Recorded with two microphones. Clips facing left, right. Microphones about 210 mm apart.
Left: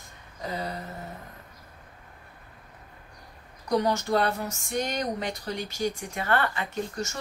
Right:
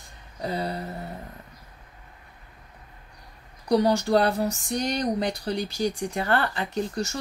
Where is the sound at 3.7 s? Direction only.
35° right (ahead or behind).